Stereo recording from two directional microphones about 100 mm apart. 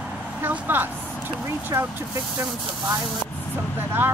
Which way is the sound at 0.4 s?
20° right (ahead or behind).